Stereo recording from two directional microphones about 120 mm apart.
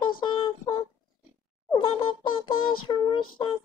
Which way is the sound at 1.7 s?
45° left (ahead or behind).